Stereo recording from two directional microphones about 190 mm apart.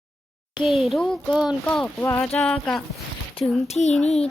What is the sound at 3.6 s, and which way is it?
Speech, 35° left (ahead or behind).